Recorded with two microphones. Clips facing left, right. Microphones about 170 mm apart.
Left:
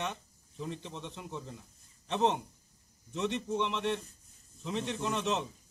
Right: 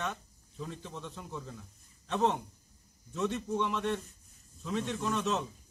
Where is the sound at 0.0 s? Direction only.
20° left (ahead or behind).